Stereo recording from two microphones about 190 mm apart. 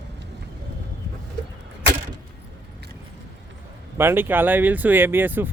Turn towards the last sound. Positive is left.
turn(degrees=-10)  # may be behind; listen again after turning